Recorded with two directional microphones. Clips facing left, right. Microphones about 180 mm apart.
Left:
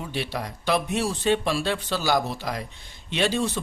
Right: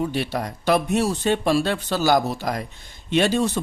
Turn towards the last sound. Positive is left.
turn(degrees=-45)  # may be behind; listen again after turning